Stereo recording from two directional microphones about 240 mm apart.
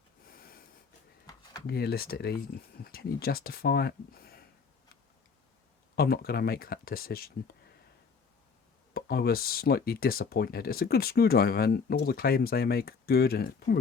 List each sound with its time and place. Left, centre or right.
0.3 s snort: left
1.6 s speech: left
6.0 s speech: left
8.9 s speech: left